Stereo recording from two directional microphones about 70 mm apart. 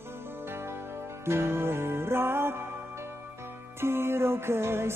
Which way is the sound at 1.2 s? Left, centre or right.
Right.